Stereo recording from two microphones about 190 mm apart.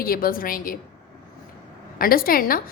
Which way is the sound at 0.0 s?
50° left (ahead or behind).